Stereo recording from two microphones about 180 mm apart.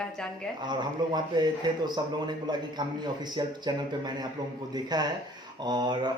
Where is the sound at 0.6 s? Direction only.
25° right (ahead or behind).